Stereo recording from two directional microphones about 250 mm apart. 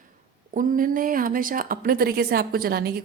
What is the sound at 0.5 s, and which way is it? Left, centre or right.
A woman's voice, right.